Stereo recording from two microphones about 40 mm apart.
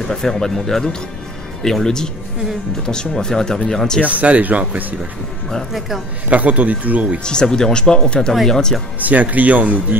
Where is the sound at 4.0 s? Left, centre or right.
Right.